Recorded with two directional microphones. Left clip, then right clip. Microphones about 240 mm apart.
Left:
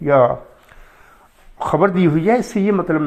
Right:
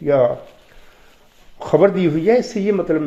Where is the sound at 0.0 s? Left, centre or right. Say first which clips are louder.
Left 2 dB; left.